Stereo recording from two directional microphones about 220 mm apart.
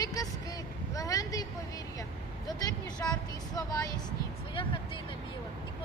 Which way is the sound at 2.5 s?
15° left (ahead or behind).